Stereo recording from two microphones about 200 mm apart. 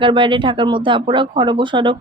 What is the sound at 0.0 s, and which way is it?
Speech, 25° right (ahead or behind).